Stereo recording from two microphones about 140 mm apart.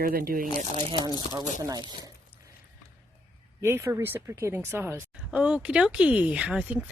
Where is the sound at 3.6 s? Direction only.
20° right (ahead or behind).